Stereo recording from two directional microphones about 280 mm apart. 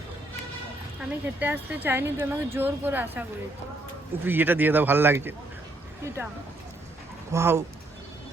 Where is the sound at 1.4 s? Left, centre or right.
Centre.